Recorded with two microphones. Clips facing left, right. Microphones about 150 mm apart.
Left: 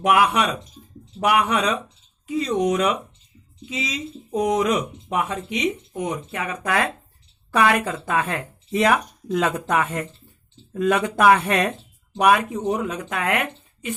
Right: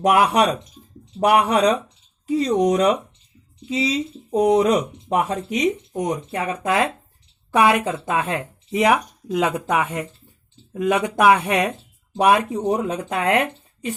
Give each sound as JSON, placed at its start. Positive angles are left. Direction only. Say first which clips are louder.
{"t": 0.0, "sound": "speech", "louder": "right 2 dB", "side_deg": -35}
{"t": 6.6, "sound": "speech", "louder": "right 2 dB", "side_deg": -20}
{"t": 12.1, "sound": "speech", "louder": "right 1 dB", "side_deg": -30}